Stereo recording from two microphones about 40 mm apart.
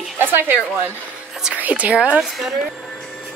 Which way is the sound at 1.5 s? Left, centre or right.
Right.